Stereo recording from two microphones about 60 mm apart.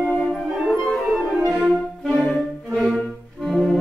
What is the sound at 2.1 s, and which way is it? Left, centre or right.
Brass instrument, centre.